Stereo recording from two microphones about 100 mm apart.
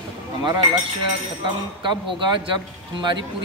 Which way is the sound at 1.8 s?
50° right (ahead or behind).